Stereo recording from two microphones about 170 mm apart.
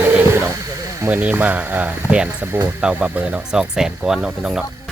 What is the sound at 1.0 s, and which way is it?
Speech, 10° right (ahead or behind).